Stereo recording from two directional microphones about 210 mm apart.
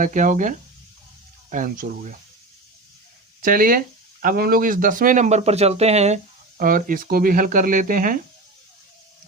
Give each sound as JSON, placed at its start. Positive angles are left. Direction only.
{"t": 0.0, "sound": "speech", "side_deg": -35}
{"t": 3.4, "sound": "speech", "side_deg": -40}
{"t": 6.6, "sound": "speech", "side_deg": -40}